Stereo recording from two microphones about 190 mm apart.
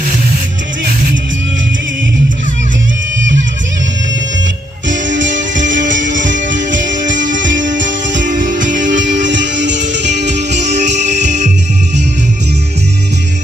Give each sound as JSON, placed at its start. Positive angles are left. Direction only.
{"t": 4.9, "sound": "music", "side_deg": -75}
{"t": 5.4, "sound": "music", "side_deg": -40}
{"t": 5.9, "sound": "music", "side_deg": -75}
{"t": 8.1, "sound": "music", "side_deg": -45}
{"t": 9.3, "sound": "music", "side_deg": -70}
{"t": 10.2, "sound": "music", "side_deg": -40}